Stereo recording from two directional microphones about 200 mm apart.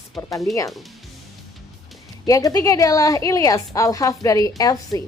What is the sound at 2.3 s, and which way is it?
Speech, 15° left (ahead or behind).